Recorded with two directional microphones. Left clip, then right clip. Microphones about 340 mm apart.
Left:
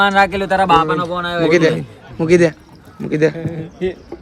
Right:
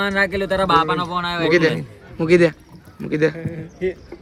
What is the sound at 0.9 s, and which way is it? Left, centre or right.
Speech, centre.